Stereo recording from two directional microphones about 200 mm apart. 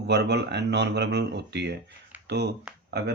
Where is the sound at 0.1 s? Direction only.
55° right (ahead or behind).